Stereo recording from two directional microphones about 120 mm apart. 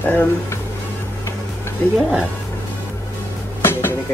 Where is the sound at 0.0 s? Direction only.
15° left (ahead or behind).